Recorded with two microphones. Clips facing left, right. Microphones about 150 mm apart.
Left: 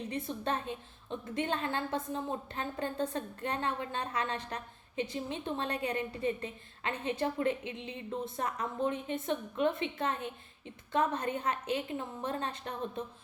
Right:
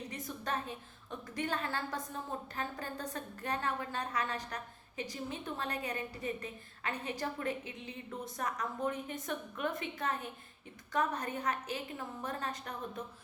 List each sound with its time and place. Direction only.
0.1 s a woman's voice: 25° left (ahead or behind)